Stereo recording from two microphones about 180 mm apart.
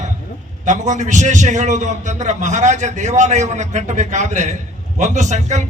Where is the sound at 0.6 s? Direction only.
40° right (ahead or behind).